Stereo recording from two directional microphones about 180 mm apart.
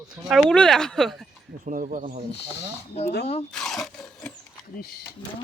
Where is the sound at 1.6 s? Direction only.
45° right (ahead or behind).